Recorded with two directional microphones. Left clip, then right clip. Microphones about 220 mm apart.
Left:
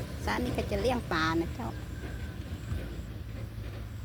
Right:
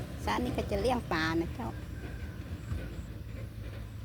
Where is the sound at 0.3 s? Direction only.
10° right (ahead or behind).